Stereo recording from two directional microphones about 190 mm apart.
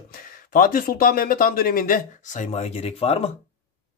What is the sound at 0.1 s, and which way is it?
A man's voice, 50° left (ahead or behind).